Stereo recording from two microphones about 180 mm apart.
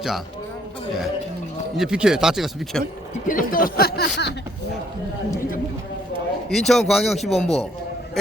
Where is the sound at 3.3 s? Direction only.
50° left (ahead or behind).